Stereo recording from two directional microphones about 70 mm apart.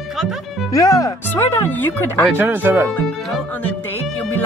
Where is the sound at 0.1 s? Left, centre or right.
Centre.